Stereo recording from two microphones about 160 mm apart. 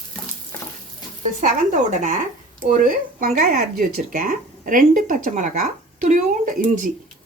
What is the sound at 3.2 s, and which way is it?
A woman's voice, 55° right (ahead or behind).